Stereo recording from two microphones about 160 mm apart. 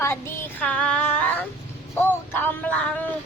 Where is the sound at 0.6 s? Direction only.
5° left (ahead or behind).